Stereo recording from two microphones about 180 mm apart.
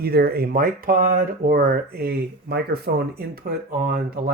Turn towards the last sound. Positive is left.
turn(degrees=-55)  # may be behind; listen again after turning